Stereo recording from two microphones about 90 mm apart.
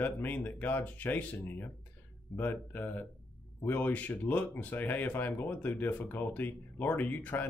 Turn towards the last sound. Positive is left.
turn(degrees=20)  # may be behind; listen again after turning